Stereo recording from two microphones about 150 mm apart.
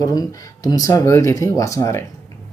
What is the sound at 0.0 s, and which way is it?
Speech, 25° left (ahead or behind).